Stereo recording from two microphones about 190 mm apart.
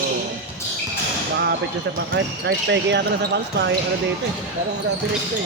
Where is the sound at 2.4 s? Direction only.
65° right (ahead or behind).